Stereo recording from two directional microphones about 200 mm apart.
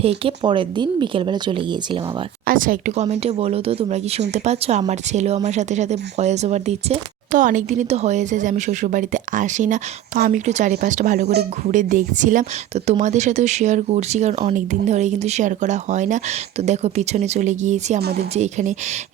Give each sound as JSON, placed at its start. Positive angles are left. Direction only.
{"t": 0.0, "sound": "speech", "side_deg": -30}
{"t": 2.5, "sound": "speech", "side_deg": -45}
{"t": 18.0, "sound": "a woman's voice", "side_deg": -55}
{"t": 18.3, "sound": "speech", "side_deg": -35}